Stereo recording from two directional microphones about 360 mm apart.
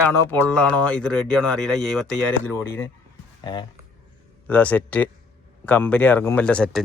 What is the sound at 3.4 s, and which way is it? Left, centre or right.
Speech, centre.